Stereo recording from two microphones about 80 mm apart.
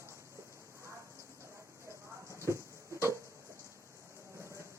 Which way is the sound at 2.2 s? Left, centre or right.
Right.